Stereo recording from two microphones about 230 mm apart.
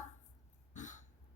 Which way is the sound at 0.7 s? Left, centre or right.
Left.